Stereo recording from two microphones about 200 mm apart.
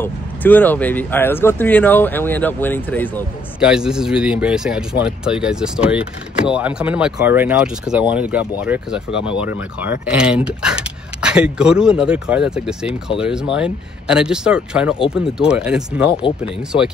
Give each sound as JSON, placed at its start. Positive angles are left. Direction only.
{"t": 0.0, "sound": "speech", "side_deg": 10}
{"t": 3.5, "sound": "speech", "side_deg": -5}
{"t": 15.0, "sound": "speech", "side_deg": 25}
{"t": 15.3, "sound": "speech", "side_deg": -5}